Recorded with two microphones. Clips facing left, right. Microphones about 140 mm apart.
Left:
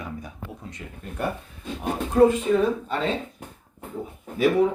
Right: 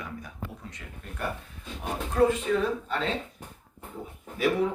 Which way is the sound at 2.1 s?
20° left (ahead or behind).